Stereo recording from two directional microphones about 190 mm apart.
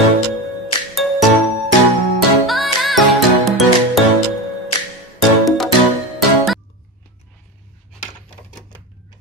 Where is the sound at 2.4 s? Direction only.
Centre (ahead or behind).